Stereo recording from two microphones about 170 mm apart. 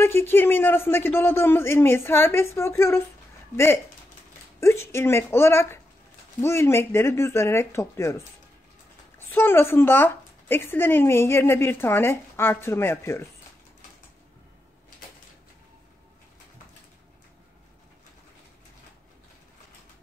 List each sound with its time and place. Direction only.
0.0 s speech: 15° left (ahead or behind)
9.3 s speech: 10° left (ahead or behind)